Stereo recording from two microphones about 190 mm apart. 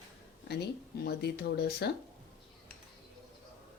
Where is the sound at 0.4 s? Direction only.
60° left (ahead or behind).